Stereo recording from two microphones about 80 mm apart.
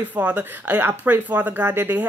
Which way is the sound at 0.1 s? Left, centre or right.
Right.